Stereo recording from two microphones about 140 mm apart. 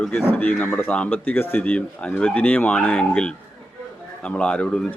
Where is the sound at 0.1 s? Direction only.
15° left (ahead or behind).